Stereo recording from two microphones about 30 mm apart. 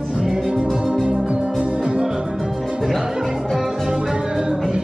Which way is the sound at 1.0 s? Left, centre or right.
Right.